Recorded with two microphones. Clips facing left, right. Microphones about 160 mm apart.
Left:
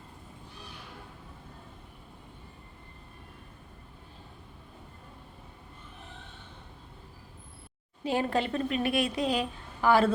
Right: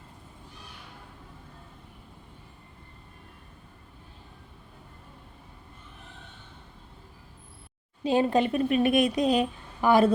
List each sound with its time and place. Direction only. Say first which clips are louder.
8.0 s a woman's voice: right 5 dB; 20° right (ahead or behind)